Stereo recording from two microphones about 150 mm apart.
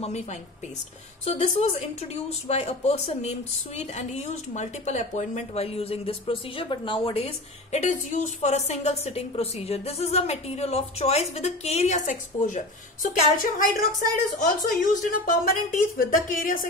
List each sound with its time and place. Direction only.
0.0 s speech: 45° left (ahead or behind); by 16.6 s 65° left (ahead or behind)